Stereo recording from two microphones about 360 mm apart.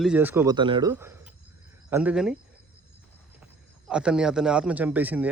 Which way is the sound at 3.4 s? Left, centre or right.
Centre.